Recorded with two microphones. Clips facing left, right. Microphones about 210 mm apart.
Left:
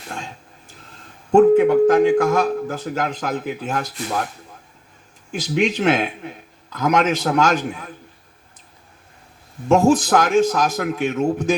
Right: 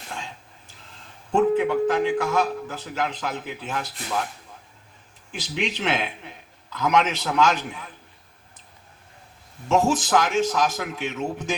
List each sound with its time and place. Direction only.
0.1 s a sound: 50° left (ahead or behind)
1.3 s speech: 45° left (ahead or behind)
5.3 s speech: 45° left (ahead or behind)
9.6 s speech: 50° left (ahead or behind)